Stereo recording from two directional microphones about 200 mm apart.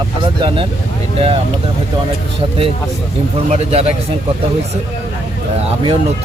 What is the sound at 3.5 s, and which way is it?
Speech, 30° right (ahead or behind).